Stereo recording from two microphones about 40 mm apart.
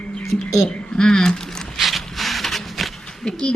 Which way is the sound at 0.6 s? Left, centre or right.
Centre.